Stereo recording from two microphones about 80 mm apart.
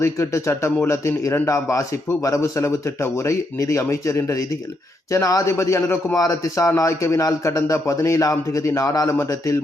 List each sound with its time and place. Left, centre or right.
0.0 s a man's voice: left